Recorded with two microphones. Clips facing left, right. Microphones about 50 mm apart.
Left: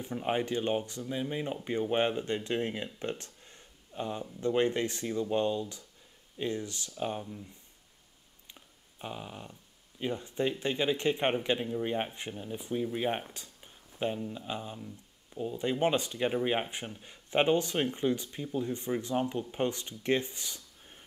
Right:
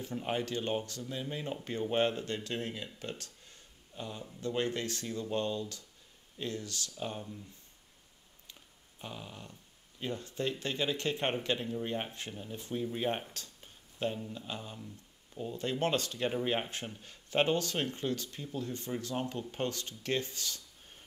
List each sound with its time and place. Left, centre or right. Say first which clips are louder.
0.0 s speech: left 3 dB; left
8.5 s speech: left 5 dB; centre